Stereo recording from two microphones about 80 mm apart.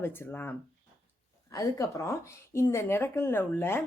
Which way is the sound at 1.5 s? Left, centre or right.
Left.